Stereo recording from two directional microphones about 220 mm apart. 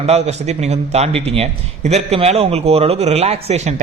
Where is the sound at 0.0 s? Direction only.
30° right (ahead or behind).